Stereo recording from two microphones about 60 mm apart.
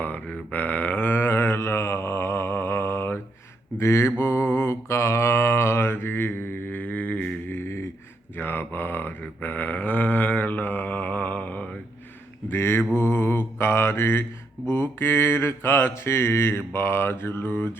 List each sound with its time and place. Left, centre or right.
0.0 s a sound: left
1.1 s mantra: left
8.4 s mantra: left
12.5 s mantra: left